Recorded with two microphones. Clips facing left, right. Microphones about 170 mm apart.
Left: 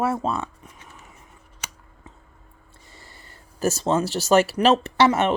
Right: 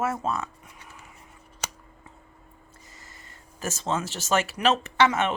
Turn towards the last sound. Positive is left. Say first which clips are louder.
# left 4 dB
turn(degrees=35)  # may be behind; listen again after turning